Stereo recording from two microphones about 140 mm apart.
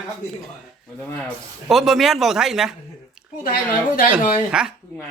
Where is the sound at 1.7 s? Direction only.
Centre (ahead or behind).